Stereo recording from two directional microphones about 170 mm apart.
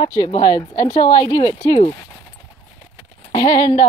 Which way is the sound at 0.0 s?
20° left (ahead or behind).